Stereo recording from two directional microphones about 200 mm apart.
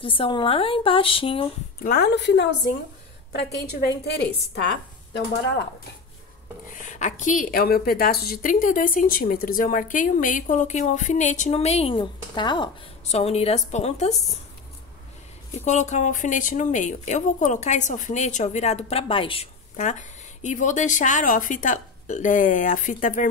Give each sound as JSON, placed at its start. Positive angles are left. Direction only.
{"t": 0.0, "sound": "speech", "side_deg": 25}
{"t": 1.8, "sound": "a woman's voice", "side_deg": 50}
{"t": 3.8, "sound": "a woman's voice", "side_deg": 55}
{"t": 6.7, "sound": "speech", "side_deg": 40}
{"t": 15.6, "sound": "speech", "side_deg": 35}